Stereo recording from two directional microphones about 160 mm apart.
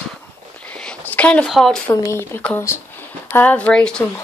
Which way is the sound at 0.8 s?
10° left (ahead or behind).